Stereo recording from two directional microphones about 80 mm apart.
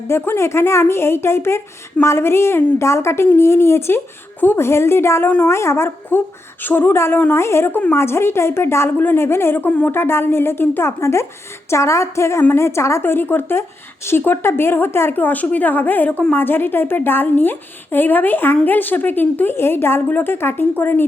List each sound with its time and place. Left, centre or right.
0.1 s a woman's voice: left